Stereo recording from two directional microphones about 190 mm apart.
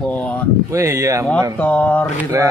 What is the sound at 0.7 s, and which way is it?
Speech, 15° right (ahead or behind).